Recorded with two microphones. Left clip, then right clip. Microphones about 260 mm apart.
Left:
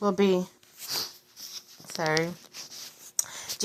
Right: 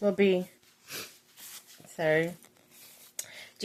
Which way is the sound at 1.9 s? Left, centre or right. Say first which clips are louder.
Even; left.